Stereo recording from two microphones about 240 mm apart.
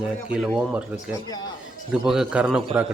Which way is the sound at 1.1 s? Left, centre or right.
Centre.